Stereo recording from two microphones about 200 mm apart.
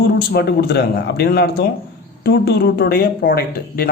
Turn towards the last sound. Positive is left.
turn(degrees=50)  # may be behind; listen again after turning